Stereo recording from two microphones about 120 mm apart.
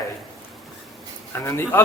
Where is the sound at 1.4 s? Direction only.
20° left (ahead or behind).